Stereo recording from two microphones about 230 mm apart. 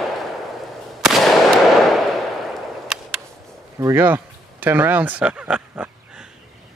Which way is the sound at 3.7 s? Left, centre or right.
Centre.